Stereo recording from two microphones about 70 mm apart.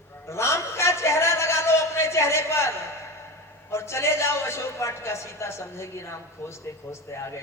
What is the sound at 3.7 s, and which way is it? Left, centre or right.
A woman's voice, left.